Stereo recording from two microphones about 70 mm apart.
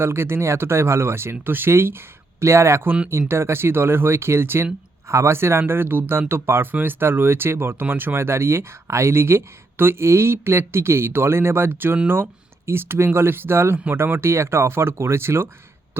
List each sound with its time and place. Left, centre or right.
0.0 s speech: right